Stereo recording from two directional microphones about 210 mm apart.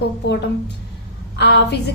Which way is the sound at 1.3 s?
55° left (ahead or behind).